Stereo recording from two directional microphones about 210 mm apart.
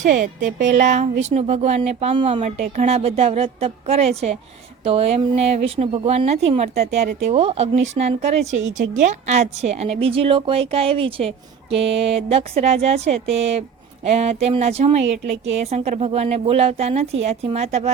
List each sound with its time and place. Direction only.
0.0 s a woman's voice: 35° right (ahead or behind)